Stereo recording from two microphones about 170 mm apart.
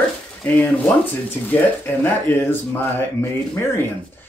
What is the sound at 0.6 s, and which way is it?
A man's voice, 10° left (ahead or behind).